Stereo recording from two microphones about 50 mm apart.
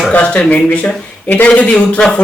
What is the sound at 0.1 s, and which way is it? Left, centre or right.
Speech, left.